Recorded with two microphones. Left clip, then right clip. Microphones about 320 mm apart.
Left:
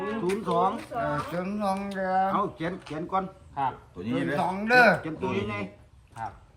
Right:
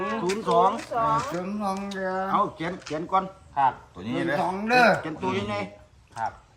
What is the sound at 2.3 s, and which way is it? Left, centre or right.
Speech, right.